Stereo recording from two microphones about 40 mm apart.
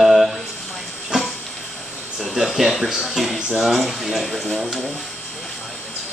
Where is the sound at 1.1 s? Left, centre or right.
Centre.